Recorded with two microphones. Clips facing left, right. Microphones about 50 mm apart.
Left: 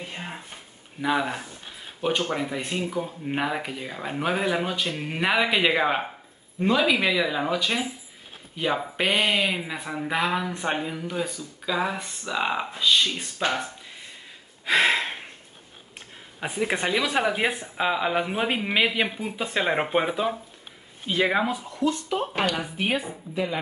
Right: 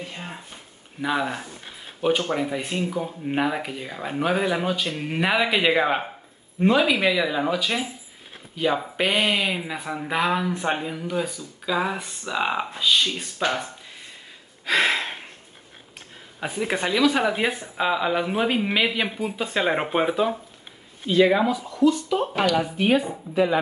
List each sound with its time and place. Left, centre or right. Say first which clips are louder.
1.0 s speech: even; centre
6.6 s speech: right 3 dB; centre
6.9 s speech: right 1 dB; centre
14.7 s a sound: even; centre
16.3 s speech: right 1 dB; centre
21.1 s speech: right 5 dB; centre
23.3 s speech: right 7 dB; right